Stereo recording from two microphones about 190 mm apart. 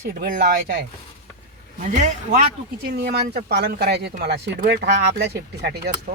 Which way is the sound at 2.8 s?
55° right (ahead or behind).